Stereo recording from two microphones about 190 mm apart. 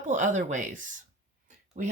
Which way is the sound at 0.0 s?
40° right (ahead or behind).